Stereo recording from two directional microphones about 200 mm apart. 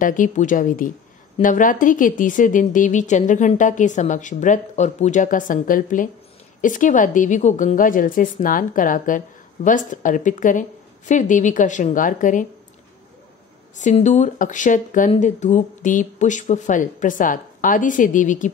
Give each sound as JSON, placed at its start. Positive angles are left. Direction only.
{"t": 0.0, "sound": "speech", "side_deg": 40}
{"t": 13.7, "sound": "speech", "side_deg": 35}